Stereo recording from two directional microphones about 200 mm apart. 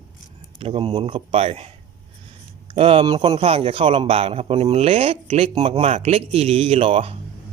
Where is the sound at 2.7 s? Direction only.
25° right (ahead or behind).